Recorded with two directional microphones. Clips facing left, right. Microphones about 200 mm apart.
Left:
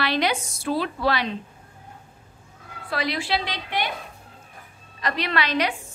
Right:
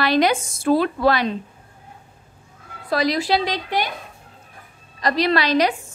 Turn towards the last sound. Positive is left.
turn(degrees=-35)  # may be behind; listen again after turning